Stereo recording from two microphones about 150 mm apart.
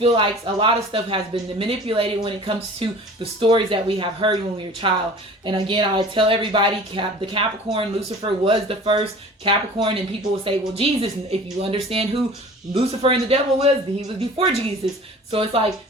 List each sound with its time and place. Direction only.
0.0 s a woman's voice: 35° right (ahead or behind)